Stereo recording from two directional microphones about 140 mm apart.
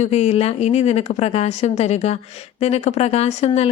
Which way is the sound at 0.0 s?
50° left (ahead or behind).